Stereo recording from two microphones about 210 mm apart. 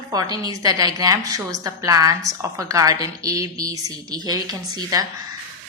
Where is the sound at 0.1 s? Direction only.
20° right (ahead or behind).